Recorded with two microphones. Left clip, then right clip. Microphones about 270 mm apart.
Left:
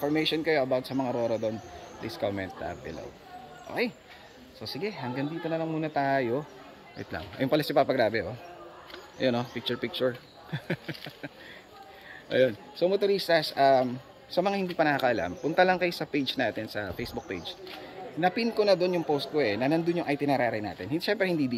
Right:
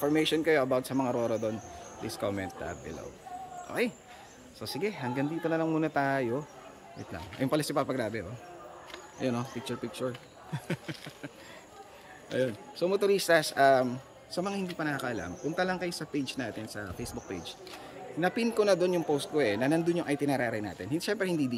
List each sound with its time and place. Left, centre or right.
0.0 s speech: centre
3.8 s speech: centre
14.4 s speech: centre